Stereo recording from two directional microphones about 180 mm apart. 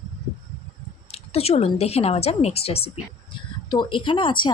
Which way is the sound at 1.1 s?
35° left (ahead or behind).